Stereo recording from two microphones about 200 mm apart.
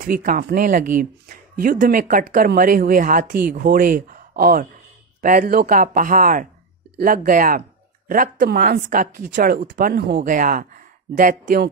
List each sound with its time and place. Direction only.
0.0 s speech: 40° right (ahead or behind)